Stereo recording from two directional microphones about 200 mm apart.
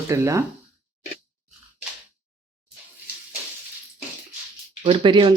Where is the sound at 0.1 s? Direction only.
15° right (ahead or behind).